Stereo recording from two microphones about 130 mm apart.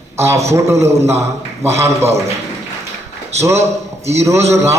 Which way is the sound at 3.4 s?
20° right (ahead or behind).